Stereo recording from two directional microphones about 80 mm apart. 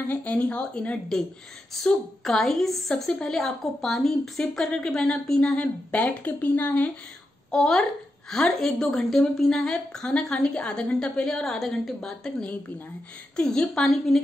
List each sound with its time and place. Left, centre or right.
0.1 s a woman's voice: centre
7.5 s a woman's voice: centre